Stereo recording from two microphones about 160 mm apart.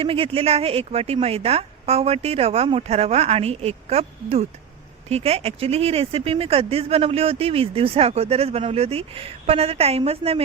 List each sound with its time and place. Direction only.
0.0 s speech: 35° right (ahead or behind)